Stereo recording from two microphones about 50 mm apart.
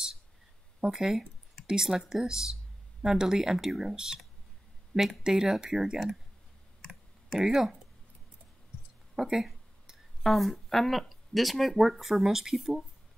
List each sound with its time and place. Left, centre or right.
0.7 s speech: centre
3.9 s speech: centre
6.8 s clicking: centre
9.1 s a sound: centre
10.2 s speech: centre